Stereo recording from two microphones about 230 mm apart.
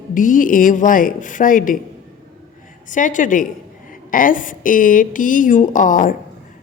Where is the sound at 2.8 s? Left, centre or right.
Left.